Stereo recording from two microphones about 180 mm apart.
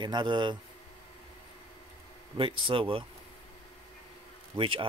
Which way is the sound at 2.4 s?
30° right (ahead or behind).